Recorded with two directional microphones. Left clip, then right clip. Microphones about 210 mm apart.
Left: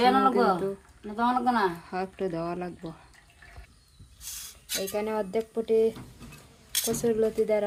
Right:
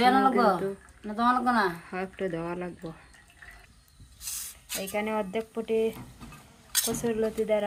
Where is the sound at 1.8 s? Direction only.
10° left (ahead or behind).